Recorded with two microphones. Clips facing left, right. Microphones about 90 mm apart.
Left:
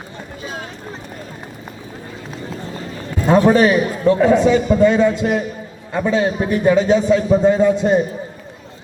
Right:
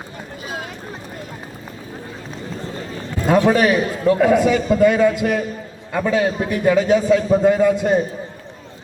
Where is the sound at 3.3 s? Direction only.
35° left (ahead or behind).